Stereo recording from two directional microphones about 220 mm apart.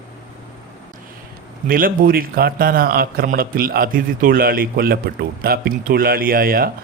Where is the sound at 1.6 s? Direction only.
40° right (ahead or behind).